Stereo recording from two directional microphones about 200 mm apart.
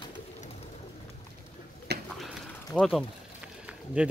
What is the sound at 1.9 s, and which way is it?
Bird, 55° right (ahead or behind).